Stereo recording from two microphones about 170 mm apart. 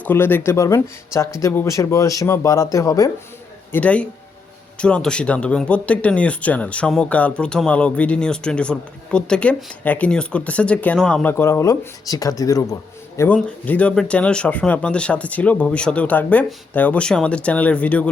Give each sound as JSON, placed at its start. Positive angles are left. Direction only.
{"t": 0.0, "sound": "speech", "side_deg": 10}
{"t": 3.7, "sound": "speech", "side_deg": 10}